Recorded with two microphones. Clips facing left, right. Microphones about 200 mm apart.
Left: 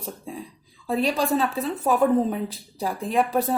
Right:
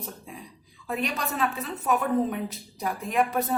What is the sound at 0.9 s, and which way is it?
A woman's voice, 30° left (ahead or behind).